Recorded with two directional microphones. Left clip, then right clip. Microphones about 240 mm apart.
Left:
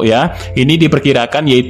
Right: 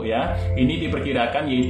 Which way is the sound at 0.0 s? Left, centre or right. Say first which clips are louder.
Left 11 dB; left.